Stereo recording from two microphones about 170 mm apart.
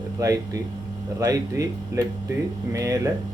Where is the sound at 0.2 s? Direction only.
20° right (ahead or behind).